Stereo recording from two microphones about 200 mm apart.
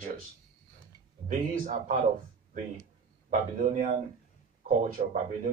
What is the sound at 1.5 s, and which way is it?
Speech, 40° right (ahead or behind).